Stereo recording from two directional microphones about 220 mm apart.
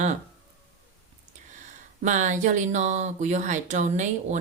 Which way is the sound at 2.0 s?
35° right (ahead or behind).